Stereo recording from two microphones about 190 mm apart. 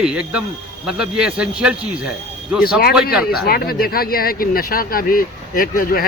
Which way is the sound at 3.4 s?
55° left (ahead or behind).